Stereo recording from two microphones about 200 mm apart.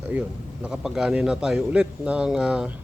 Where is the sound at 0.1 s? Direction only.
5° right (ahead or behind).